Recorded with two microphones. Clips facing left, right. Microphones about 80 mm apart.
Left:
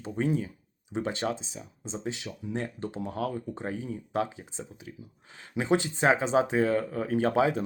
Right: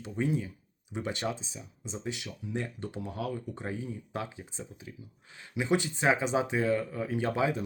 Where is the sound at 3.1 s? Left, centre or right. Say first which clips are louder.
Left 4 dB; left.